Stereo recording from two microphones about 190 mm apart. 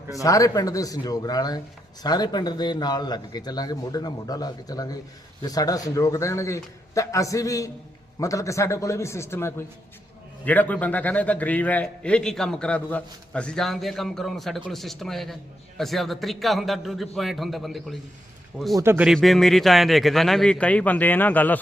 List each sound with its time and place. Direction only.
0.1 s a man's voice: 15° left (ahead or behind); by 17.9 s centre (ahead or behind)
18.8 s a man's voice: 10° right (ahead or behind); by 21.6 s 10° left (ahead or behind)